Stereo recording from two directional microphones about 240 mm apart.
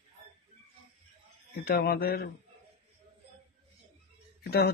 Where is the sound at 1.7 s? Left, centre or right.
Left.